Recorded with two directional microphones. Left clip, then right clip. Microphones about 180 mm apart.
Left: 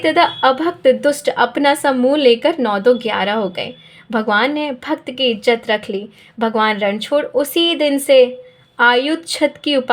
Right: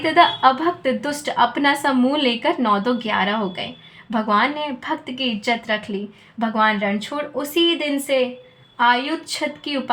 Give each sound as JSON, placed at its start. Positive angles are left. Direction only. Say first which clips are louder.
{"t": 0.0, "sound": "a woman's voice", "louder": "left 1 dB", "side_deg": 20}